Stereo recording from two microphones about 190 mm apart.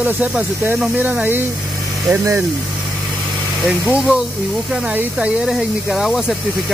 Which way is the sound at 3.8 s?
5° right (ahead or behind).